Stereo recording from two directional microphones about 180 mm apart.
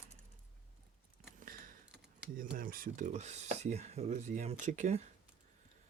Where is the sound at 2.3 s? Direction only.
50° right (ahead or behind).